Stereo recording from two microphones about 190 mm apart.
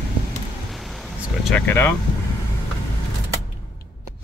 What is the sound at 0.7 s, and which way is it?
Vehicle, centre (ahead or behind).